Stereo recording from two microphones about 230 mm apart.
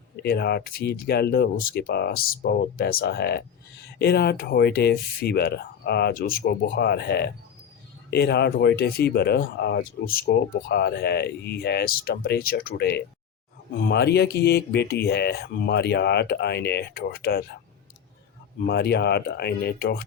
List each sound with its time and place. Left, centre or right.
0.2 s speech: left
18.6 s speech: left